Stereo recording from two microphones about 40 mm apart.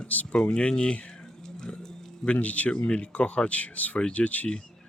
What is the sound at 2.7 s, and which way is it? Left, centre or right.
Speech, left.